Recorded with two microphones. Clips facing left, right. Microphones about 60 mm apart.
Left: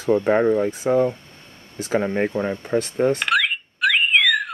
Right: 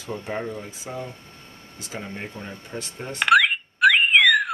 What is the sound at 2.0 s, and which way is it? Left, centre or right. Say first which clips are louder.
Speech: left 11 dB; left.